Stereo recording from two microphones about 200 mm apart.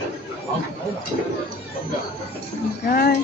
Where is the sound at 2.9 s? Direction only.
50° left (ahead or behind).